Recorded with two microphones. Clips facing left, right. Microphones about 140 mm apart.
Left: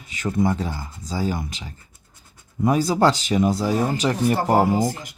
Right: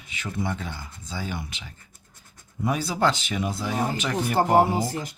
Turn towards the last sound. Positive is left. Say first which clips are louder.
# left 2 dB
turn(degrees=35)  # may be behind; listen again after turning